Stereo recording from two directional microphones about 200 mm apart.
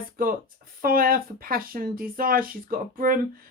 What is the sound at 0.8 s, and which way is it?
Speech, 45° right (ahead or behind).